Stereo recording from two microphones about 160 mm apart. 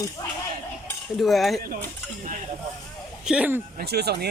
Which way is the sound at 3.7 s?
90° right.